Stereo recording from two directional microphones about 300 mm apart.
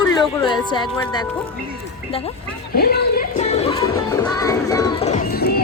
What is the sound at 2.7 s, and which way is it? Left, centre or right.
Music, left.